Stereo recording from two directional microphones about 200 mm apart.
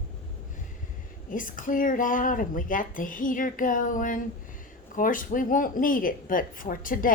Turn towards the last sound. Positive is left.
turn(degrees=45)  # may be behind; listen again after turning